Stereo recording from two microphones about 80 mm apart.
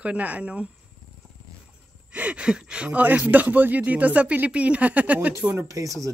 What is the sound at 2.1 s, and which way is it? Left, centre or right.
Speech, centre.